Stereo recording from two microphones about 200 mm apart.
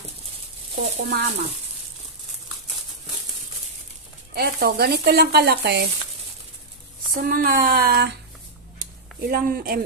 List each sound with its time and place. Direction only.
0.9 s speech: 55° right (ahead or behind)
4.4 s speech: 50° right (ahead or behind)
7.1 s speech: 45° right (ahead or behind)
8.8 s a sound: 45° right (ahead or behind)